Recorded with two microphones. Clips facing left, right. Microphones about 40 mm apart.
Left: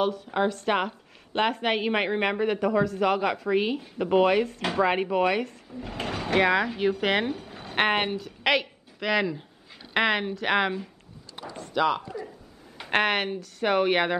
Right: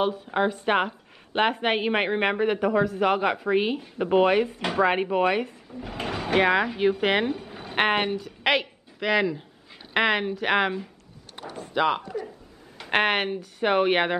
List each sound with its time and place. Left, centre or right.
0.0 s a woman's voice: centre
4.6 s speech: centre
5.9 s a woman's voice: centre
11.7 s a woman's voice: centre